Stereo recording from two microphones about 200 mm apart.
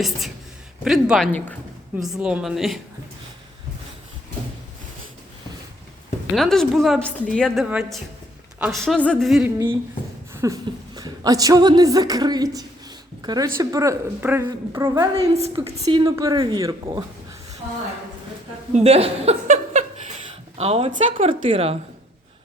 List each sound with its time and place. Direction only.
0.9 s a woman's voice: centre (ahead or behind)
6.3 s a woman's voice: centre (ahead or behind)
10.3 s a woman's voice: 15° right (ahead or behind)
15.1 s speech: 30° right (ahead or behind)
18.7 s a woman's voice: 30° right (ahead or behind)